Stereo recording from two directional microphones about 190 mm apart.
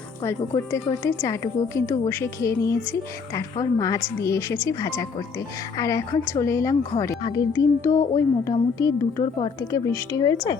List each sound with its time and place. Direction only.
0.2 s a woman's voice: 15° left (ahead or behind)